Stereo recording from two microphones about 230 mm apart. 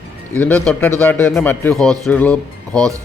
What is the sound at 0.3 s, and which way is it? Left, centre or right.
Speech, centre.